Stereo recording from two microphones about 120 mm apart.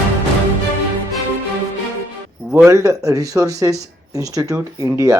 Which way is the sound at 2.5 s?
25° right (ahead or behind).